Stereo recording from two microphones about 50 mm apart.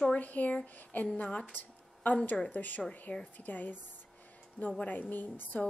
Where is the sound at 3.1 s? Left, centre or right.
Centre.